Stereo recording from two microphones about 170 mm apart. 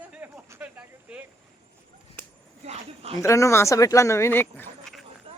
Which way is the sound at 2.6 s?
35° right (ahead or behind).